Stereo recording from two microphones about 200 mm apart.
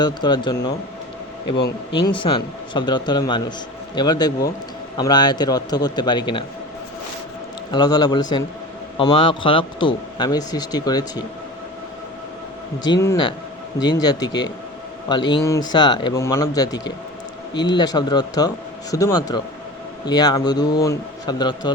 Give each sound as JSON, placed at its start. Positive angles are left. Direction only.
{"t": 0.0, "sound": "a man's voice", "side_deg": 20}
{"t": 1.9, "sound": "a man's voice", "side_deg": 25}
{"t": 7.7, "sound": "a man's voice", "side_deg": 20}
{"t": 12.8, "sound": "a man's voice", "side_deg": 15}